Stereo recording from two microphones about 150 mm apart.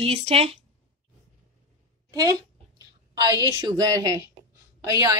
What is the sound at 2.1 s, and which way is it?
A woman's voice, 25° right (ahead or behind).